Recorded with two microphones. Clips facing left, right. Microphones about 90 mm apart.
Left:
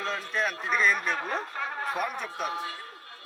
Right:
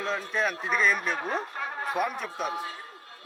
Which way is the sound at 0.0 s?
30° right (ahead or behind).